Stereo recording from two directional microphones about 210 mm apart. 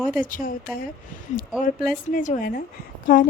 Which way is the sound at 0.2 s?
40° left (ahead or behind).